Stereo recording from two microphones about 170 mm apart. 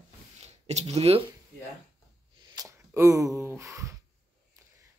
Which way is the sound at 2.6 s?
20° right (ahead or behind).